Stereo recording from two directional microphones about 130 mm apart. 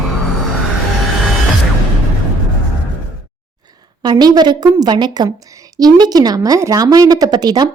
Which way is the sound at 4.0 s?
35° right (ahead or behind).